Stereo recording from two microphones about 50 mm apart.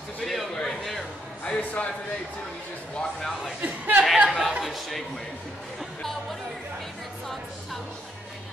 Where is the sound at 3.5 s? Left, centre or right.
Right.